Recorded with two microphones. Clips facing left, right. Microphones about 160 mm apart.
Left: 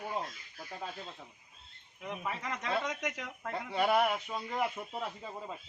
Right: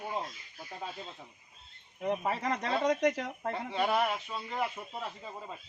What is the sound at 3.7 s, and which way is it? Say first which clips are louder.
Speech: left 2 dB; 10° left (ahead or behind).